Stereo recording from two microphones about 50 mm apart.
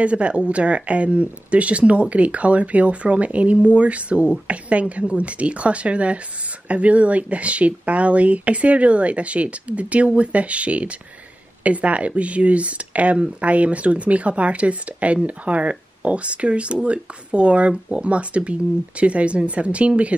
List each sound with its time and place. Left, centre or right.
0.0 s speech: right